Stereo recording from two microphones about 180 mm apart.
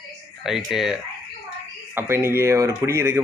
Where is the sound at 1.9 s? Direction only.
15° right (ahead or behind).